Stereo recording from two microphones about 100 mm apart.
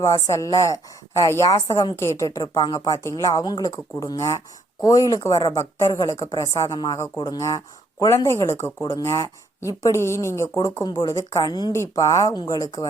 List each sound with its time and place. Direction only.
0.0 s speech: 30° left (ahead or behind)
2.6 s a woman's voice: 50° left (ahead or behind)
2.8 s speech: 30° left (ahead or behind)
5.3 s a woman's voice: 50° left (ahead or behind)
5.5 s speech: 30° left (ahead or behind)